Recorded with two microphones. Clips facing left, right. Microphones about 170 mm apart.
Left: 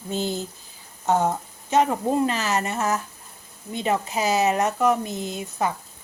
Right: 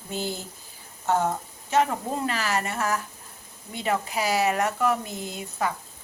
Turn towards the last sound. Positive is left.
turn(degrees=20)  # may be behind; listen again after turning